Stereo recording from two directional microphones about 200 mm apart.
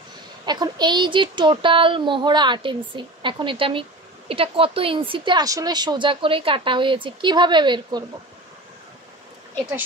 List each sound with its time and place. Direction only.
0.5 s a woman's voice: 20° right (ahead or behind)